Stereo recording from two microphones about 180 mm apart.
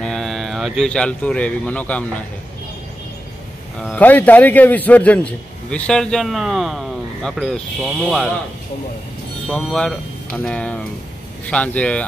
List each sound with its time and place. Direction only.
0.0 s speech: centre (ahead or behind)
3.8 s a man's voice: 10° left (ahead or behind)
9.5 s a man's voice: centre (ahead or behind)